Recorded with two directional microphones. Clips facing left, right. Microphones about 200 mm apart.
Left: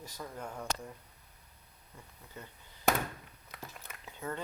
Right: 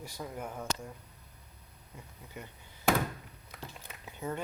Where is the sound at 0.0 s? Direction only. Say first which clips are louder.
Right 3 dB; 10° right (ahead or behind).